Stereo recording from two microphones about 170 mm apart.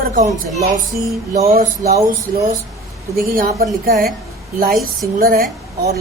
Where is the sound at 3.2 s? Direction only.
60° right (ahead or behind).